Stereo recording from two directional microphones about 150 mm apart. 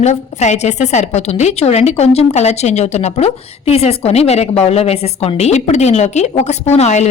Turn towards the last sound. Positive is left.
turn(degrees=50)  # may be behind; listen again after turning